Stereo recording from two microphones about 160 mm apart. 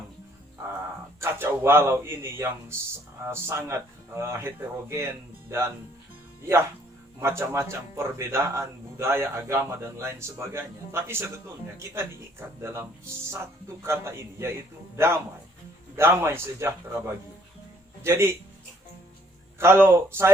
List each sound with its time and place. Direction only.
1.2 s speech: 15° right (ahead or behind)
7.2 s a man's voice: 20° right (ahead or behind)
18.0 s a man's voice: 15° right (ahead or behind)
19.5 s speech: 15° right (ahead or behind)